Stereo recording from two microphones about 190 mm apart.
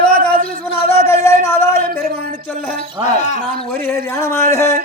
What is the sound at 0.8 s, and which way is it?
Speech, 15° left (ahead or behind).